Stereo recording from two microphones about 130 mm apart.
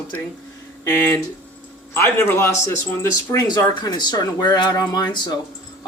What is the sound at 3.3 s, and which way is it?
Speech, 30° left (ahead or behind).